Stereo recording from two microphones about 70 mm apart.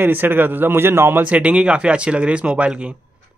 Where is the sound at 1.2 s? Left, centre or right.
Right.